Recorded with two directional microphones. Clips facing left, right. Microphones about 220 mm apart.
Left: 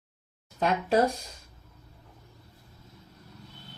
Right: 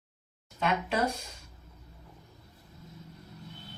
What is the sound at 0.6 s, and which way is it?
Speech, 40° left (ahead or behind).